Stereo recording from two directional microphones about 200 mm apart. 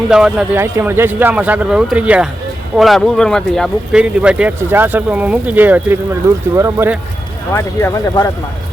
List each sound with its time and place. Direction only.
0.1 s speech: 5° right (ahead or behind)
7.5 s speech: 15° left (ahead or behind)